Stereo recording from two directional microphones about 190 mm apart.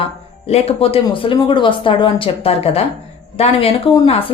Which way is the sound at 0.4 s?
35° left (ahead or behind).